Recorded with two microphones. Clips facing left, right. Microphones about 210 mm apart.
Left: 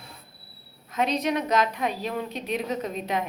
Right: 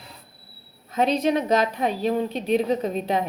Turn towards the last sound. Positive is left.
turn(degrees=-30)  # may be behind; listen again after turning